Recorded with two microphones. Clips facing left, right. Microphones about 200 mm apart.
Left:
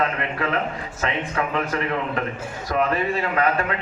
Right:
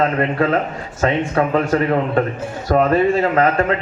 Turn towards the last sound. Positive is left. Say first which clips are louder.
# right 6 dB
turn(degrees=-40)  # may be behind; listen again after turning